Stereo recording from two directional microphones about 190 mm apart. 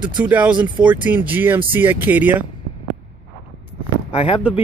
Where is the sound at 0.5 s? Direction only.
25° right (ahead or behind).